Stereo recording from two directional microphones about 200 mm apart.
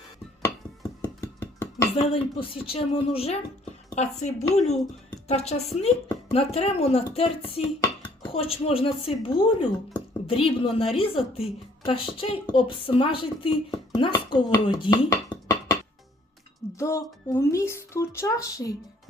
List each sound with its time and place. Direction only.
0.4 s dishes: 20° left (ahead or behind)
2.0 s a woman's voice: 30° left (ahead or behind)